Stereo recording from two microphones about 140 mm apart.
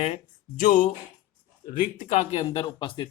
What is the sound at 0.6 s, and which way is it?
Speech, 70° left (ahead or behind).